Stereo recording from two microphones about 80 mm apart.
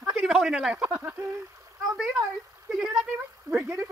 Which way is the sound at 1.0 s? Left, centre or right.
Right.